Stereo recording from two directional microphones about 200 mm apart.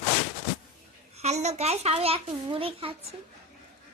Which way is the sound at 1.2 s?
35° right (ahead or behind).